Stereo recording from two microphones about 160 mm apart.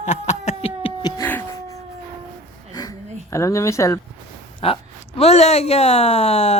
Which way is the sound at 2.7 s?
20° left (ahead or behind).